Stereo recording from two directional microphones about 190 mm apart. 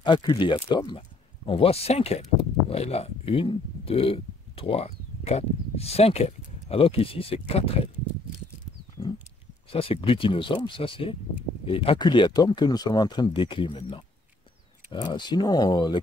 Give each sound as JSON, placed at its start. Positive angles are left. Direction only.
{"t": 0.0, "sound": "speech", "side_deg": 25}
{"t": 9.7, "sound": "speech", "side_deg": 30}